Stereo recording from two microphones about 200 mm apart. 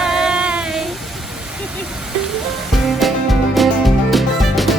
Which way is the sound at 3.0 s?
Centre (ahead or behind).